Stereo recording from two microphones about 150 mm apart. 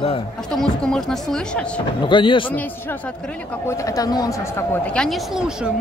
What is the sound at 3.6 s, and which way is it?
A man's voice, 20° left (ahead or behind).